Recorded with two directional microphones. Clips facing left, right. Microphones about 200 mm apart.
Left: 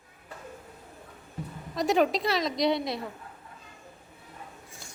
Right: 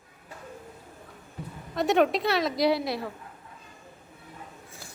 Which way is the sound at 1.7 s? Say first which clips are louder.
Right 2 dB; centre (ahead or behind).